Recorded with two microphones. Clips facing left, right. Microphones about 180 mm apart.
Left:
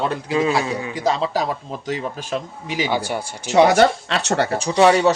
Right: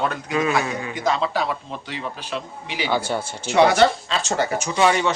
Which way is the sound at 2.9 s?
15° left (ahead or behind).